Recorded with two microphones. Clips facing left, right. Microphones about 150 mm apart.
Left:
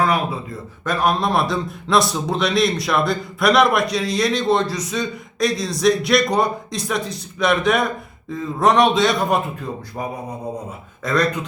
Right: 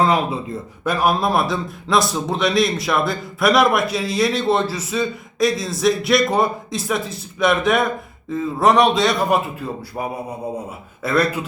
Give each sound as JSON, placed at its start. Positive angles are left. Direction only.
{"t": 0.0, "sound": "speech", "side_deg": -25}
{"t": 0.9, "sound": "a man's voice", "side_deg": -5}